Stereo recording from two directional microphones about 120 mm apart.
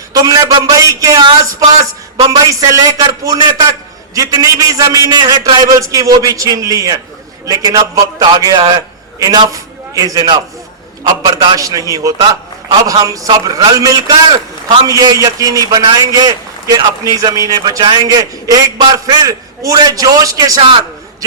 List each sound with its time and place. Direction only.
0.1 s a man's voice: 30° right (ahead or behind)
20.6 s a man's voice: 45° right (ahead or behind)